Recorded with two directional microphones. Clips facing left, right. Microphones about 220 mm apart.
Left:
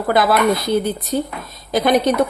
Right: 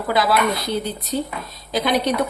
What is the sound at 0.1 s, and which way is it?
A woman's voice, 50° left (ahead or behind).